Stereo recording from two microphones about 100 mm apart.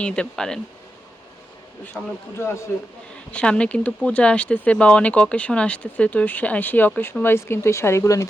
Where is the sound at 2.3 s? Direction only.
25° left (ahead or behind).